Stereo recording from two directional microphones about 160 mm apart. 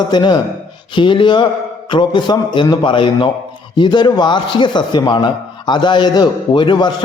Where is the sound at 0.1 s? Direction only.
25° left (ahead or behind).